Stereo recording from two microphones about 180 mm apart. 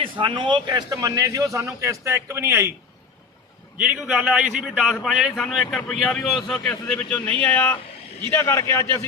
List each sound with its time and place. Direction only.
0.0 s a man's voice: 30° right (ahead or behind)
3.8 s a man's voice: 5° right (ahead or behind); by 9.0 s 15° left (ahead or behind)